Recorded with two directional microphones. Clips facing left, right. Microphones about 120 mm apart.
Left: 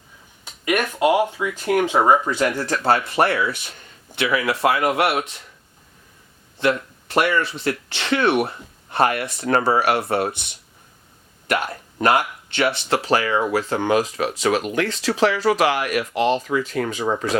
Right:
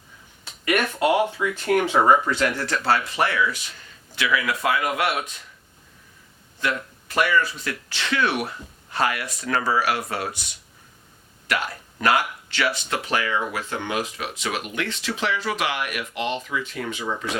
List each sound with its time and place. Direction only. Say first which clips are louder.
0.4 s speech: left 1 dB; 15° left (ahead or behind)
2.6 s speech: left 3 dB; 45° left (ahead or behind)
3.5 s a sound: left 2 dB; 55° left (ahead or behind)
4.2 s speech: left 4 dB; 30° left (ahead or behind)
6.6 s speech: left 6 dB; 30° left (ahead or behind)
8.9 s a sound: left 5 dB; 50° left (ahead or behind)
9.1 s speech: left 6 dB; 30° left (ahead or behind)
11.4 s speech: left 4 dB; 25° left (ahead or behind); by 17.3 s 45° left (ahead or behind)